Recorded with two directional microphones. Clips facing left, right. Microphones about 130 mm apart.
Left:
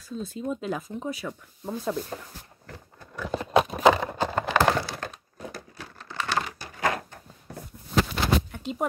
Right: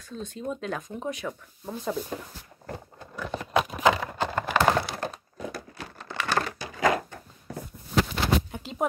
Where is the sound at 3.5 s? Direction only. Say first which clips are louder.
Left 3 dB; 30° left (ahead or behind).